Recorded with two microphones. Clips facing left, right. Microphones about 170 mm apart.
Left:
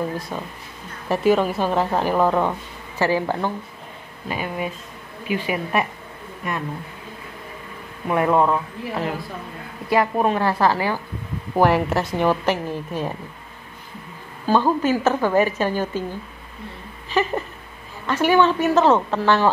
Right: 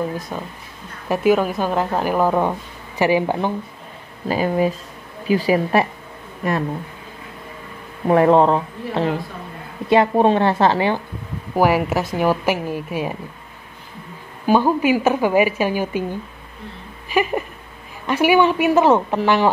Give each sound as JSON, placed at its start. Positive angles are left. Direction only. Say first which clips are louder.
{"t": 0.3, "sound": "a woman's voice", "louder": "right 1 dB", "side_deg": -5}
{"t": 4.3, "sound": "a woman's voice", "louder": "right 8 dB", "side_deg": -35}
{"t": 8.1, "sound": "a woman's voice", "louder": "right 5 dB", "side_deg": -30}
{"t": 11.5, "sound": "a woman's voice", "louder": "right 1 dB", "side_deg": -5}
{"t": 14.4, "sound": "a woman's voice", "louder": "right 2 dB", "side_deg": -15}